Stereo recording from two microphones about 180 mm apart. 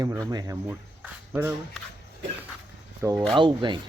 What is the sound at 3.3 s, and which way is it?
Speech, 25° right (ahead or behind).